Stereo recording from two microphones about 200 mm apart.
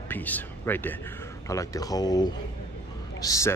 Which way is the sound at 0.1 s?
10° left (ahead or behind).